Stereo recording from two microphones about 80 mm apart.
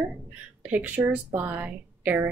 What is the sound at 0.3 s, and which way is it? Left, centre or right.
A woman's voice, centre.